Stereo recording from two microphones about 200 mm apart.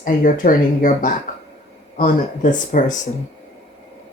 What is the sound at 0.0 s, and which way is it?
Speech, 45° left (ahead or behind).